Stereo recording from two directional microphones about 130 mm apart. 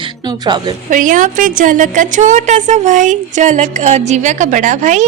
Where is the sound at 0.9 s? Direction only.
90° right.